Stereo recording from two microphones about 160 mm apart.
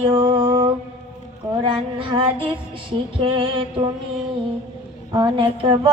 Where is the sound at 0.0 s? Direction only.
35° right (ahead or behind).